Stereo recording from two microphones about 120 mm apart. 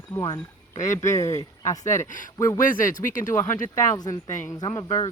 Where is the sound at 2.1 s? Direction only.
90° left.